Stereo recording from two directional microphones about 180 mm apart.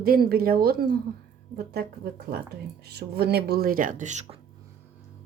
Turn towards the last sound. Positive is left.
turn(degrees=-40)  # may be behind; listen again after turning